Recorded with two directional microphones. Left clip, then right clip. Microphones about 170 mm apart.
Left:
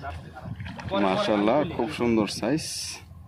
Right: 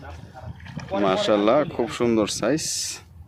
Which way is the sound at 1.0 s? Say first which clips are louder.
Right 4 dB; 25° right (ahead or behind).